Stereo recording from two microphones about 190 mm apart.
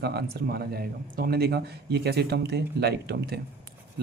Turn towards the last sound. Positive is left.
turn(degrees=-60)  # may be behind; listen again after turning